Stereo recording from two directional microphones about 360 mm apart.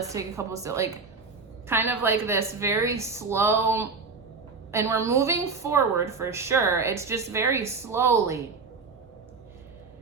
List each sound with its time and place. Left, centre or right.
0.1 s a woman's voice: centre